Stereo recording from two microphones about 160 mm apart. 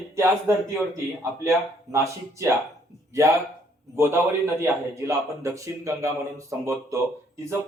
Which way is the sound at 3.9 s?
15° right (ahead or behind).